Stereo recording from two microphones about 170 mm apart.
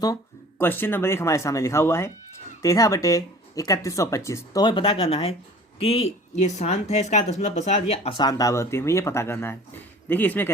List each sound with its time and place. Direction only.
0.6 s speech: 10° left (ahead or behind)